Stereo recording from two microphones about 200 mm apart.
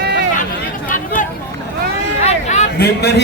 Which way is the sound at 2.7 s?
55° left (ahead or behind).